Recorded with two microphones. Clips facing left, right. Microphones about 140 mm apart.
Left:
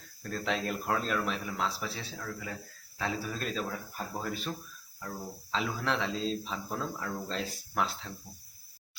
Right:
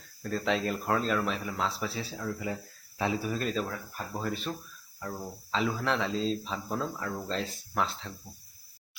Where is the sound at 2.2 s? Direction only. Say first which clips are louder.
Right 8 dB; 20° right (ahead or behind).